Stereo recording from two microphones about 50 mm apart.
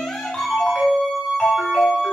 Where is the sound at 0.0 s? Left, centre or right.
Centre.